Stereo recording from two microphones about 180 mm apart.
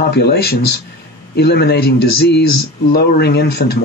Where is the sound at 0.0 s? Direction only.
65° left (ahead or behind).